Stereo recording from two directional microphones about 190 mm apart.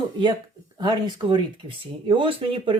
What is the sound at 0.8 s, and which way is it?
Speech, 25° right (ahead or behind).